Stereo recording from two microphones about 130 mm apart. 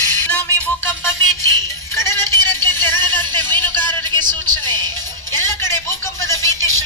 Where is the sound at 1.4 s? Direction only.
20° left (ahead or behind).